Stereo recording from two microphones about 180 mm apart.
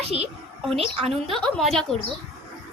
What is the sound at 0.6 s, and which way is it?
Speech, centre (ahead or behind).